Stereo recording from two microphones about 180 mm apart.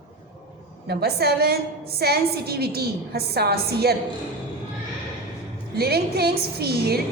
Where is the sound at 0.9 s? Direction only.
60° right (ahead or behind).